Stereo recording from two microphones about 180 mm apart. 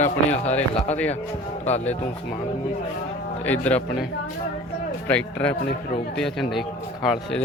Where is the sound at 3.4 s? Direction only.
10° left (ahead or behind).